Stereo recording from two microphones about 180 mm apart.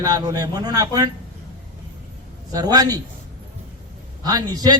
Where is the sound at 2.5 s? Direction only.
20° right (ahead or behind).